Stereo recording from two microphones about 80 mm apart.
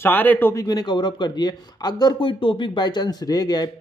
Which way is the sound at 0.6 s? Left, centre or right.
Left.